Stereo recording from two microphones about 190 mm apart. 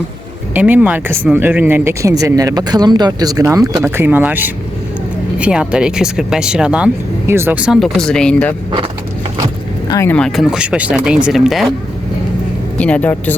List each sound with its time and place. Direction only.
0.5 s speech: 10° right (ahead or behind)
9.9 s speech: 10° left (ahead or behind)
12.7 s speech: 5° left (ahead or behind)